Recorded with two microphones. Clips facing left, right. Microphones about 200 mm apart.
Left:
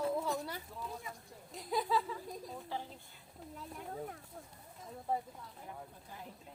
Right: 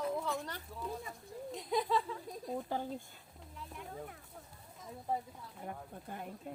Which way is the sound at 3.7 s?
40° left (ahead or behind).